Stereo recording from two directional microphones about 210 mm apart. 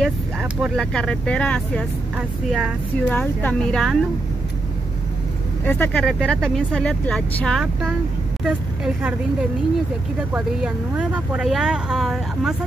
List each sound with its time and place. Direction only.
0.0 s speech: 5° right (ahead or behind)
2.1 s speech: 5° right (ahead or behind)
3.1 s speech: 5° left (ahead or behind)
5.7 s speech: 5° left (ahead or behind)